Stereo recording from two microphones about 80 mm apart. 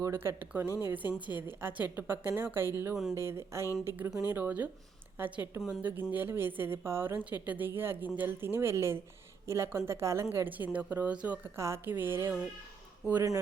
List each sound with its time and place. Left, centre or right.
0.0 s speech: right
2.9 s speech: centre
3.2 s speech: right
7.3 s speech: centre; by 10.2 s right
10.3 s speech: right
11.5 s speech: right